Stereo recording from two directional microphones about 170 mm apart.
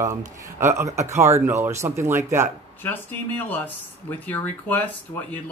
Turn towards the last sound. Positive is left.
turn(degrees=10)  # may be behind; listen again after turning